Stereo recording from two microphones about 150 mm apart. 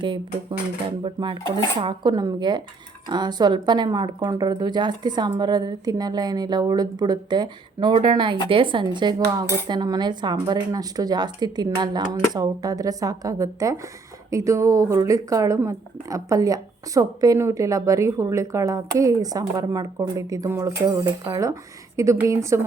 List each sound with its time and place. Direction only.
0.9 s speech: 35° right (ahead or behind)